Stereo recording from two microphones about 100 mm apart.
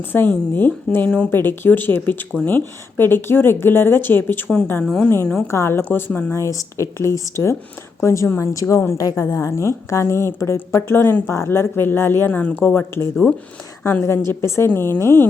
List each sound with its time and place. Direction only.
0.0 s a woman's voice: 20° left (ahead or behind)
1.3 s a woman's voice: 20° left (ahead or behind)
4.8 s speech: 5° left (ahead or behind)
5.0 s a woman's voice: 20° left (ahead or behind)
6.3 s a woman's voice: 30° left (ahead or behind)
14.3 s a woman's voice: 30° left (ahead or behind)